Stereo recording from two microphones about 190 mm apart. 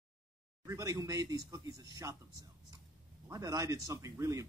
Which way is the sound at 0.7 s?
15° right (ahead or behind).